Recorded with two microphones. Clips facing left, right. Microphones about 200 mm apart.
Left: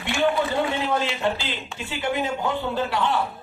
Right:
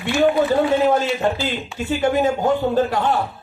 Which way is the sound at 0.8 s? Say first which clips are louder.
Right 6 dB; 45° right (ahead or behind).